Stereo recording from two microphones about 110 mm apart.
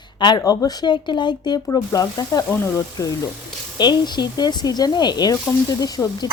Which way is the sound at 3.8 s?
40° left (ahead or behind).